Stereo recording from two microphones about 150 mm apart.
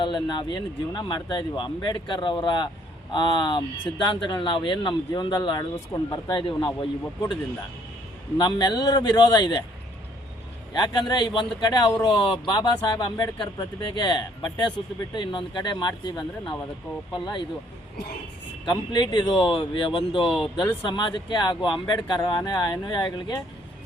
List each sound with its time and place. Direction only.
0.0 s speech: 30° left (ahead or behind)
8.4 s speech: 30° left (ahead or behind)
10.8 s speech: 30° left (ahead or behind)
18.6 s speech: 30° left (ahead or behind)